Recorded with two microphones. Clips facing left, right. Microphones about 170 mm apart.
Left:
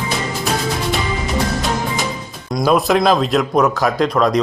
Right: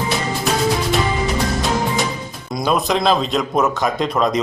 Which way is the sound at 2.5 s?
Centre (ahead or behind).